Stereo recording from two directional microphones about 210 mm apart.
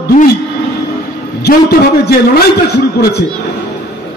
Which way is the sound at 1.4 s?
50° left (ahead or behind).